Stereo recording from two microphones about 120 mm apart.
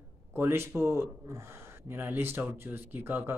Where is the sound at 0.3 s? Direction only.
20° right (ahead or behind).